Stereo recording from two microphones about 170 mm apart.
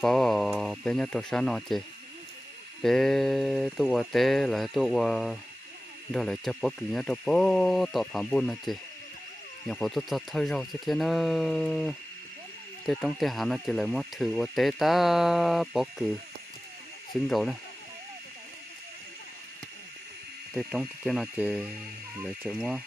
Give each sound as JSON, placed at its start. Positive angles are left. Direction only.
{"t": 0.0, "sound": "speech", "side_deg": 5}
{"t": 2.8, "sound": "speech", "side_deg": 0}
{"t": 17.1, "sound": "speech", "side_deg": 0}
{"t": 20.5, "sound": "speech", "side_deg": -5}